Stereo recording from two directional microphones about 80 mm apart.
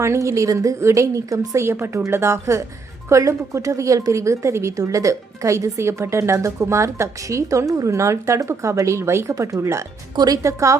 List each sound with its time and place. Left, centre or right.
0.0 s a woman's voice: right
10.2 s a woman's voice: right